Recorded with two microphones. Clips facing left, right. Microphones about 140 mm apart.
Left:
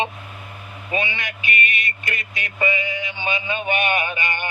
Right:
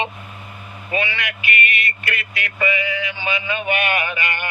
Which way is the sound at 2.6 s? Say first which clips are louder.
Right 1 dB; 25° left (ahead or behind).